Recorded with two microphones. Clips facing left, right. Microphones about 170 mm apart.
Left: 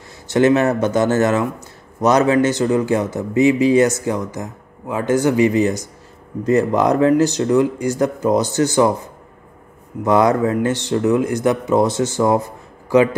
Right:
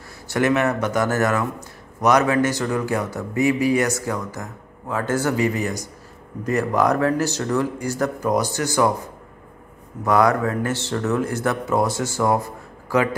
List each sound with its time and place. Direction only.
0.3 s speech: 25° left (ahead or behind)
10.0 s speech: 20° left (ahead or behind)